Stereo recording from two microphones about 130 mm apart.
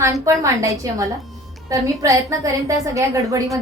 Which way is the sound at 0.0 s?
25° right (ahead or behind).